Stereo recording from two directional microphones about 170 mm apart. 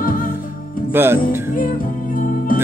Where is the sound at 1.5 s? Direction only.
55° left (ahead or behind).